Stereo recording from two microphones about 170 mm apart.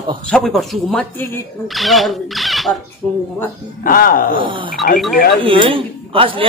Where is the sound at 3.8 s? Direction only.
55° left (ahead or behind).